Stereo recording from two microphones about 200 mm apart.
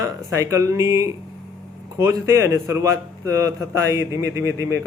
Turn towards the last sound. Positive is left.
turn(degrees=-15)  # may be behind; listen again after turning